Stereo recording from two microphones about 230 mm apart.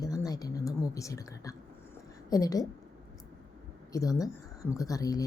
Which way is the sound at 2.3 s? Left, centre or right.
Centre.